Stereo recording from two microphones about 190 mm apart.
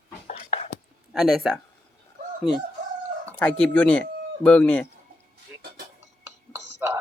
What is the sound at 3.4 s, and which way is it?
Speech, 5° left (ahead or behind).